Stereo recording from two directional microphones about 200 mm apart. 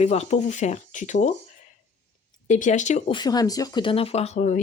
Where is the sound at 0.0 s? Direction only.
35° left (ahead or behind).